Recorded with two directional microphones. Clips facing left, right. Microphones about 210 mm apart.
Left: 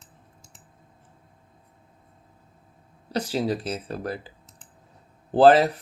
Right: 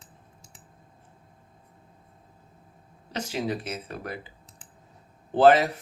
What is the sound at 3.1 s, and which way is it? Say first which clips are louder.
A man's voice: left 4 dB; 35° left (ahead or behind).